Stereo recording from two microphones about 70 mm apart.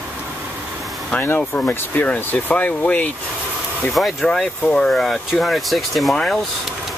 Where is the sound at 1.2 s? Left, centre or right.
Left.